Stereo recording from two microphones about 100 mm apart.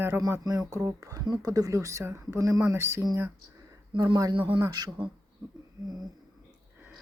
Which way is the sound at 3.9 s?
45° right (ahead or behind).